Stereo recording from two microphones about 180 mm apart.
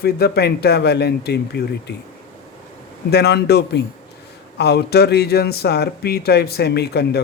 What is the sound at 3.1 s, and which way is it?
A man's voice, 65° left (ahead or behind).